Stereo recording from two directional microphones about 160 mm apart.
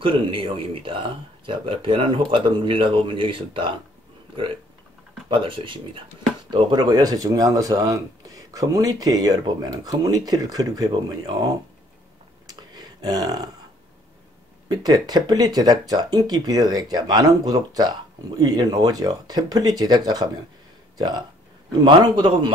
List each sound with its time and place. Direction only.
0.0 s speech: 35° right (ahead or behind)
5.3 s speech: 35° right (ahead or behind)
12.4 s a sound: 25° right (ahead or behind)
14.7 s speech: 25° right (ahead or behind)
21.8 s speech: 25° right (ahead or behind)